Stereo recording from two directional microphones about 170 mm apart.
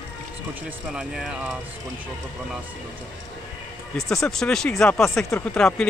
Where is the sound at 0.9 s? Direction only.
5° right (ahead or behind).